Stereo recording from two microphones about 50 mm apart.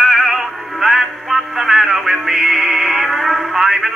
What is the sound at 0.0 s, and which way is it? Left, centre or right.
Synthetic singing, centre.